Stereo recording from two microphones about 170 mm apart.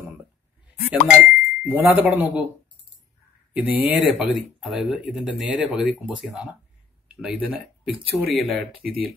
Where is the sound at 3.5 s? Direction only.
10° right (ahead or behind).